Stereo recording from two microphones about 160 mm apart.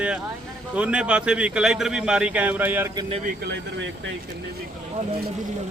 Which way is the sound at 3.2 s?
85° right.